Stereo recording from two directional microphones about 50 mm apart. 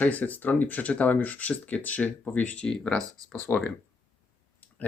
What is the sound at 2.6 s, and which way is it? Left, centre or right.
Speech, left.